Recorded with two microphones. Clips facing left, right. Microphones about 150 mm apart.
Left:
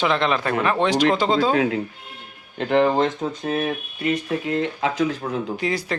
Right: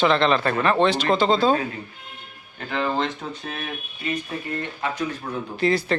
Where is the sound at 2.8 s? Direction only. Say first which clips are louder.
Left 5 dB; 45° left (ahead or behind).